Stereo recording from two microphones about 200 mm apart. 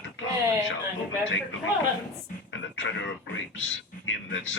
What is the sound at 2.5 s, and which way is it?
Speech, 70° left (ahead or behind).